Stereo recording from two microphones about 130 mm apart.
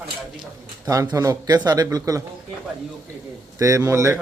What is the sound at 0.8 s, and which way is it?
Speech, 30° right (ahead or behind).